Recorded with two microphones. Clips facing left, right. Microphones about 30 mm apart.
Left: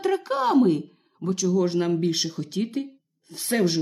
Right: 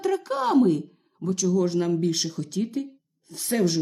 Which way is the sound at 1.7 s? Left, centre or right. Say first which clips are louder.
Left 1 dB; left.